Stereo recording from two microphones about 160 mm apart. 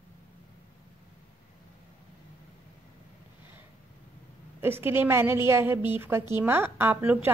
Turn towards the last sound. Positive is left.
turn(degrees=-10)  # may be behind; listen again after turning